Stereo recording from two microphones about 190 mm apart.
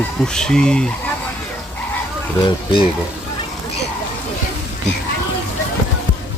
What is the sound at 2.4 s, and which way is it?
Speech, 25° left (ahead or behind).